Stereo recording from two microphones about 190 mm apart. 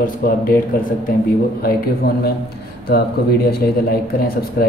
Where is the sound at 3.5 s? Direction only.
50° left (ahead or behind).